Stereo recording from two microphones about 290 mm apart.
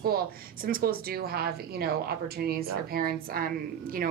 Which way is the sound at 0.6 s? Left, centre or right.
Right.